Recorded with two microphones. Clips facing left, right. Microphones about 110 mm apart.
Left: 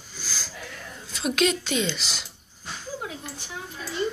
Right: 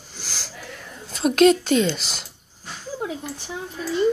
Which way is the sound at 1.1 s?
45° right (ahead or behind).